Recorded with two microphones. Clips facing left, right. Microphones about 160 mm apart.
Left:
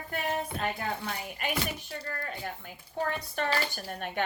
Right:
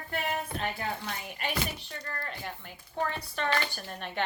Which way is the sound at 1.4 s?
45° left (ahead or behind).